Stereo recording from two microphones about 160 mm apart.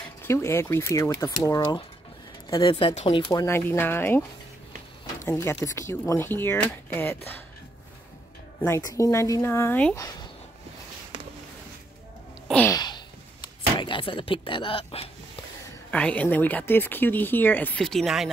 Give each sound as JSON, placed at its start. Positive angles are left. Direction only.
{"t": 0.2, "sound": "speech", "side_deg": 15}
{"t": 3.4, "sound": "speech", "side_deg": 15}
{"t": 5.2, "sound": "speech", "side_deg": 15}
{"t": 8.6, "sound": "speech", "side_deg": 20}
{"t": 12.7, "sound": "a sound", "side_deg": 25}
{"t": 15.9, "sound": "speech", "side_deg": 10}